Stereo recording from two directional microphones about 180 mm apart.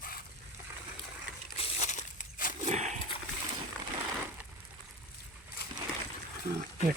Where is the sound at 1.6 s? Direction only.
40° left (ahead or behind).